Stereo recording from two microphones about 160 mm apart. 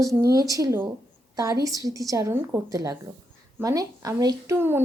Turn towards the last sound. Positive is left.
turn(degrees=-15)  # may be behind; listen again after turning